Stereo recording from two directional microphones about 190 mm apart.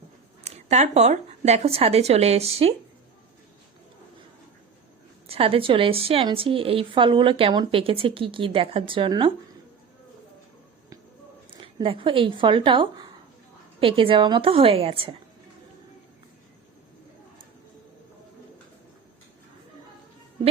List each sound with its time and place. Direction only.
0.4 s speech: 35° right (ahead or behind)
5.3 s a woman's voice: 30° right (ahead or behind)
11.5 s a woman's voice: 30° right (ahead or behind)